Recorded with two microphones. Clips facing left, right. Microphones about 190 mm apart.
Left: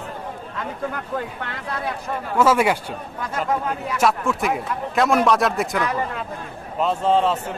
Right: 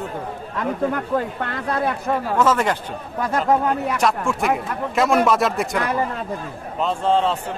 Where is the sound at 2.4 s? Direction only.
10° left (ahead or behind).